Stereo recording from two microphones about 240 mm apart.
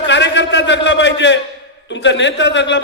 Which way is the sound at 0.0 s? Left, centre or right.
Left.